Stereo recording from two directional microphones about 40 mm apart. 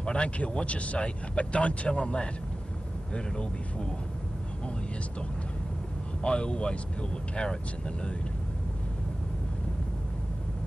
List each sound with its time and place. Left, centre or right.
0.0 s speech: left
6.2 s speech: left